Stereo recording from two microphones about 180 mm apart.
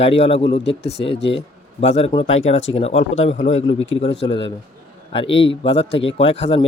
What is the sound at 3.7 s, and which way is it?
Speech, 90° left.